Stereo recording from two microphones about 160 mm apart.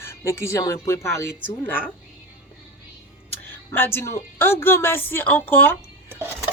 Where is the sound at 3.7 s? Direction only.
15° left (ahead or behind).